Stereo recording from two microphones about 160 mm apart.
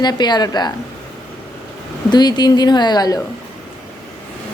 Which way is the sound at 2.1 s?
25° left (ahead or behind).